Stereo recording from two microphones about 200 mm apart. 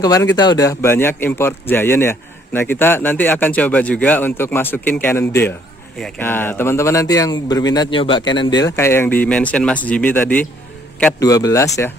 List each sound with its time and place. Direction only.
0.0 s speech: 15° left (ahead or behind)